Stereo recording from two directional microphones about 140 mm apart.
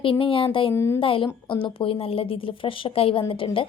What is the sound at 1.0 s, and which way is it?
Speech, 40° left (ahead or behind).